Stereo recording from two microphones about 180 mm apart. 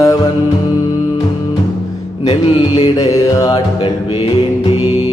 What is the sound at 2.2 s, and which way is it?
Music, 30° left (ahead or behind).